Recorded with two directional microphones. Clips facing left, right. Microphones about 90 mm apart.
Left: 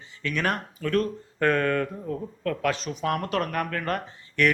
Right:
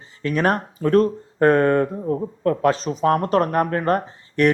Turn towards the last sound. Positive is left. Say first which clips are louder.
# right 6 dB
turn(degrees=-35)  # may be behind; listen again after turning